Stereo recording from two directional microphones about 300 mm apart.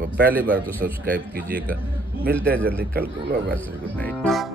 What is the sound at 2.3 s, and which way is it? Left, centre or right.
Speech, centre.